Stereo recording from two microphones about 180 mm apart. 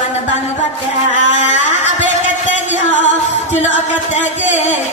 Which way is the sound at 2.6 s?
40° left (ahead or behind).